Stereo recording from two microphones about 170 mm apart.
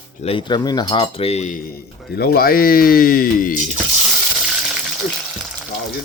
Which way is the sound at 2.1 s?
65° left (ahead or behind).